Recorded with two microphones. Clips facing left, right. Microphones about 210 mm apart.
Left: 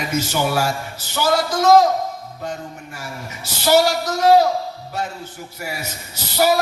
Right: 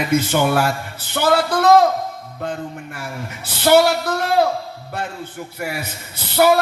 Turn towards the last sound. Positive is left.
turn(degrees=-60)  # may be behind; listen again after turning